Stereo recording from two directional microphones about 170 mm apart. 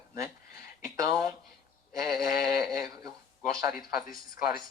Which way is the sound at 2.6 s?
20° right (ahead or behind).